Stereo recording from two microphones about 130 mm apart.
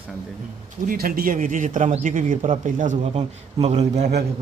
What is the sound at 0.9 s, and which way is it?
A man's voice, 90° right.